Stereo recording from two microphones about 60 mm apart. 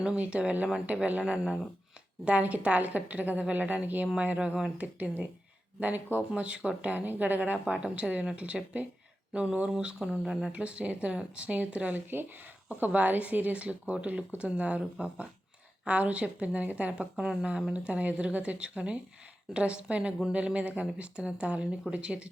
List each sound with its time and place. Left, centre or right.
0.0 s speech: centre
8.5 s speech: centre
9.3 s speech: centre